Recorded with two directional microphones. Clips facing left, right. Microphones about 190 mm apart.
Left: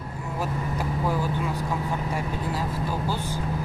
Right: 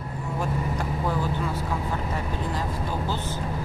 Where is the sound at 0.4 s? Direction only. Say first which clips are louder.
Even; 5° left (ahead or behind).